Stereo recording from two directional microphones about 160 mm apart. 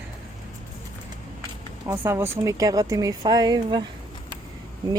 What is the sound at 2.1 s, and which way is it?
Speech, 15° right (ahead or behind).